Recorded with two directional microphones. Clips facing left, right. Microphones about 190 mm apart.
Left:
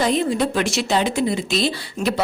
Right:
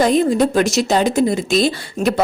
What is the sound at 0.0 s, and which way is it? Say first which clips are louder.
Speech: right 5 dB; 45° right (ahead or behind).